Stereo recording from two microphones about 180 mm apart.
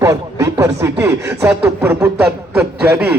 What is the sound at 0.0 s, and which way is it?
Speech, 20° right (ahead or behind).